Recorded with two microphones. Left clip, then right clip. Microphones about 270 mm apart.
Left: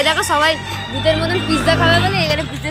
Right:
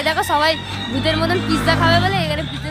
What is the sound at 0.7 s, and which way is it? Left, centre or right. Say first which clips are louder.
Speech: even; left.